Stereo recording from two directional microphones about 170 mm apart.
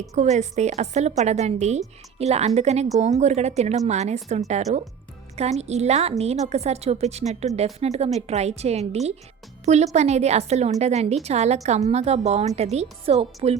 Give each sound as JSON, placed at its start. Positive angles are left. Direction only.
{"t": 0.1, "sound": "a woman's voice", "side_deg": -40}